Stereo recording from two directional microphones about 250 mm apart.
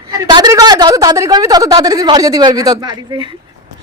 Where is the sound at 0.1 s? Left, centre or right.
Centre.